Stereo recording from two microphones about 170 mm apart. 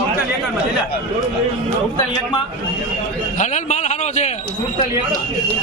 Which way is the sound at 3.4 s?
45° left (ahead or behind).